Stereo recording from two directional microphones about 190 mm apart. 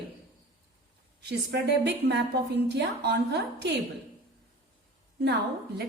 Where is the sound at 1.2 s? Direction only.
60° right (ahead or behind).